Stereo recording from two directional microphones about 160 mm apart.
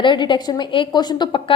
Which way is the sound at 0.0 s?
30° left (ahead or behind).